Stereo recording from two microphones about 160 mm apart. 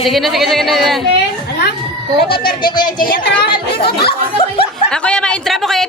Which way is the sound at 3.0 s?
60° left (ahead or behind).